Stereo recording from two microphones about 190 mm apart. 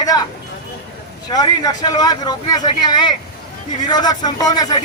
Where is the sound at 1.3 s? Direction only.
20° left (ahead or behind).